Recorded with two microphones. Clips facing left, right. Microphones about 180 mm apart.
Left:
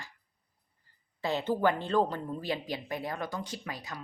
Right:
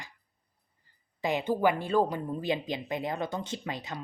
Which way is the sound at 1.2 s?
15° right (ahead or behind).